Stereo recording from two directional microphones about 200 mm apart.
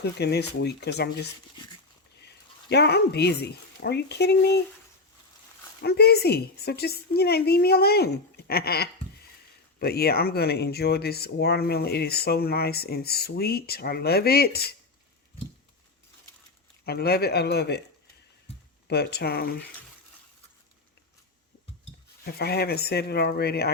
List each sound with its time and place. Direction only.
0.0 s speech: 55° left (ahead or behind)
5.8 s speech: 55° left (ahead or behind)
16.8 s speech: 50° left (ahead or behind)
18.9 s speech: 50° left (ahead or behind)
22.2 s speech: 50° left (ahead or behind)